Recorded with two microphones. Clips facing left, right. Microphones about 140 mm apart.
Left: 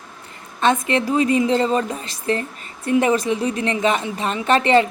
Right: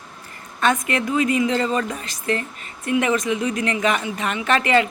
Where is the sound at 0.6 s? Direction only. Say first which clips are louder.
Left 2 dB; 25° left (ahead or behind).